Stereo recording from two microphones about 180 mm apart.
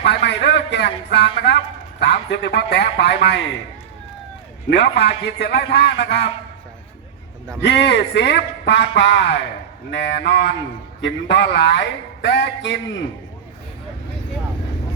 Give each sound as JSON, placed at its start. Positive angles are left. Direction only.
{"t": 0.0, "sound": "a man's voice", "side_deg": 70}
{"t": 4.7, "sound": "a man's voice", "side_deg": 70}
{"t": 7.6, "sound": "a man's voice", "side_deg": 70}